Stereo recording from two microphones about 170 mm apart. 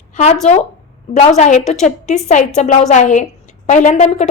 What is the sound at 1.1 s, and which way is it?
A woman's voice, 40° left (ahead or behind).